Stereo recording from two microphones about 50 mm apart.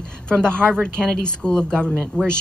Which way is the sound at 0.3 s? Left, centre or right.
Centre.